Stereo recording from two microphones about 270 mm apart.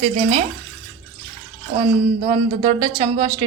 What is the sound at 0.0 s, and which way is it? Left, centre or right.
Speech, right.